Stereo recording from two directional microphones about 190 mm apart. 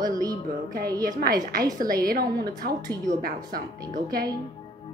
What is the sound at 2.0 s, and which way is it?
Speech, 50° right (ahead or behind).